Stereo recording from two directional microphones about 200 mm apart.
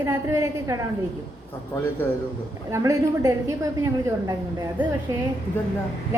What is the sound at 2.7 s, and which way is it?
A woman's voice, 15° right (ahead or behind).